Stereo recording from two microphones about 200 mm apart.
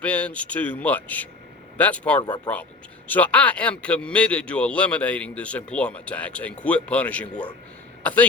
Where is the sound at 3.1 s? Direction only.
5° left (ahead or behind).